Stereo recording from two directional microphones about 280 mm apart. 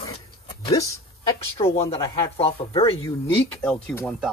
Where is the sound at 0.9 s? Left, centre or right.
Centre.